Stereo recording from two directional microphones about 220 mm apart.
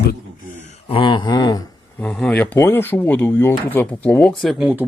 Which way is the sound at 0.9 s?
20° left (ahead or behind).